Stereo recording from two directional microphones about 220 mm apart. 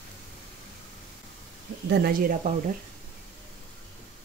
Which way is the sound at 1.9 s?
45° right (ahead or behind).